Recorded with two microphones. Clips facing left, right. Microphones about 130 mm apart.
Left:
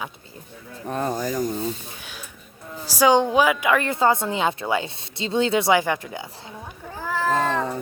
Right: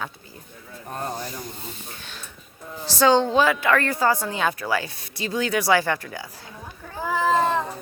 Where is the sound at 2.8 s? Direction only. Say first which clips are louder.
Left 1 dB; 10° left (ahead or behind).